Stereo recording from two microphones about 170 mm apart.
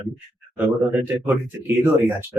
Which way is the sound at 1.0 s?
10° right (ahead or behind).